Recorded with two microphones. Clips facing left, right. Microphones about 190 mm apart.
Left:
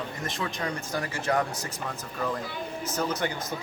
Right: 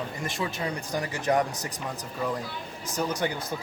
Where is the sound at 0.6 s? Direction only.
15° right (ahead or behind).